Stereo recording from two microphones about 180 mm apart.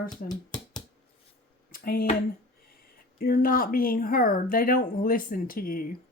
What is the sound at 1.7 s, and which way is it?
Speech, 55° left (ahead or behind).